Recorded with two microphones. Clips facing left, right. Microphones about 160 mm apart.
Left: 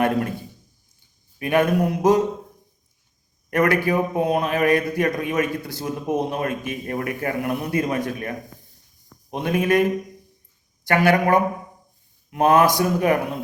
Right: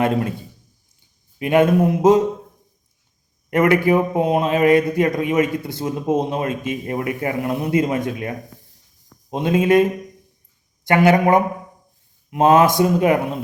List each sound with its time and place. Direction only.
0.0 s a man's voice: 20° right (ahead or behind)
3.5 s a man's voice: 20° right (ahead or behind)
10.8 s a man's voice: 20° right (ahead or behind)